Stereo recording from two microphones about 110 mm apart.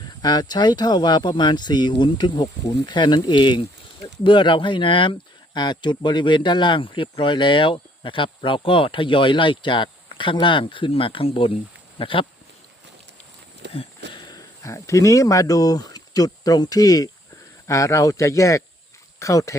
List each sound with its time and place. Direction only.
0.2 s speech: 40° left (ahead or behind)
13.7 s a sound: 45° left (ahead or behind)
14.6 s speech: 30° left (ahead or behind)